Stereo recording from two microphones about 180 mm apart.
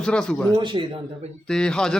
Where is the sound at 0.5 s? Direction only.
25° right (ahead or behind).